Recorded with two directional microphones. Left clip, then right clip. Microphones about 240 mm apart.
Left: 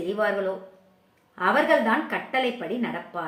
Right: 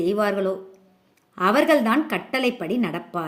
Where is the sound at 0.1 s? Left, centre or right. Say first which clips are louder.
Left 1 dB; right.